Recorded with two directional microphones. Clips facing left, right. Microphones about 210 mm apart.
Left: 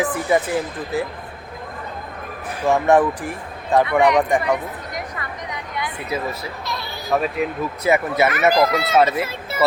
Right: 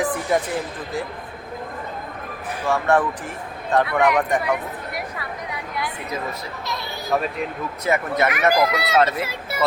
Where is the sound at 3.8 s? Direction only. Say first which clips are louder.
Left 4 dB; 5° right (ahead or behind).